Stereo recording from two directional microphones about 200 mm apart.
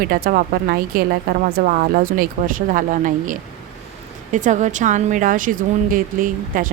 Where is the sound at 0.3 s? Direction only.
50° right (ahead or behind).